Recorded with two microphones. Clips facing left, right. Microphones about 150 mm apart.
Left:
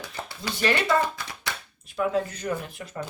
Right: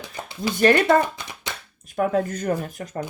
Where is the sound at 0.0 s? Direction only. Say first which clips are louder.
Right 6 dB; 15° right (ahead or behind).